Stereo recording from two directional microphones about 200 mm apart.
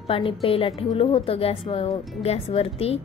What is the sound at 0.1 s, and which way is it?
A woman's voice, 25° left (ahead or behind).